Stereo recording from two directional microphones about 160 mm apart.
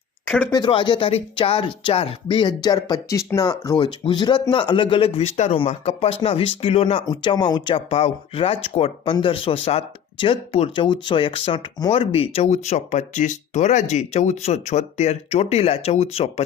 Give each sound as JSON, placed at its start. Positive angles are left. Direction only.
{"t": 0.5, "sound": "speech", "side_deg": 30}